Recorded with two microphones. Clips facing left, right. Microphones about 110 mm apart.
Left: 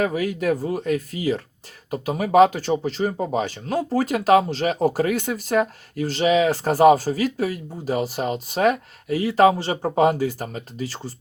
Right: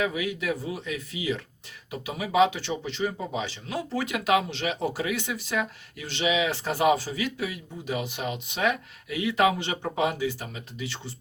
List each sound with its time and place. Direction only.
0.0 s speech: 40° left (ahead or behind)